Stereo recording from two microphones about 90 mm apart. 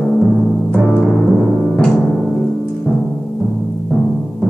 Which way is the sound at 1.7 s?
5° left (ahead or behind).